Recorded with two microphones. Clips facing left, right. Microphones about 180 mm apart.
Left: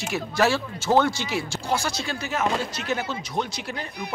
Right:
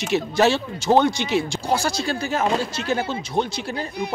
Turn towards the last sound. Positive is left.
turn(degrees=-30)  # may be behind; listen again after turning